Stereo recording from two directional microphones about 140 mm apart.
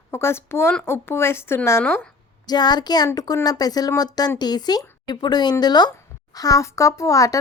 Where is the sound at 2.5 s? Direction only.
30° left (ahead or behind).